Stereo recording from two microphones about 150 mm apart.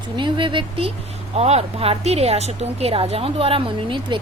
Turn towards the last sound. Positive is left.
turn(degrees=-35)  # may be behind; listen again after turning